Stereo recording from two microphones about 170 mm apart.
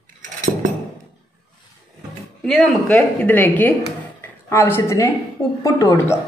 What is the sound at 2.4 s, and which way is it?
A woman's voice, 5° left (ahead or behind).